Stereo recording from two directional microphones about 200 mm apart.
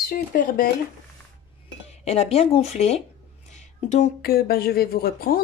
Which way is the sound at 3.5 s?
35° left (ahead or behind).